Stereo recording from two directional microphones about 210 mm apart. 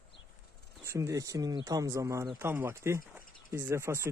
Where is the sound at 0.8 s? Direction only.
15° right (ahead or behind).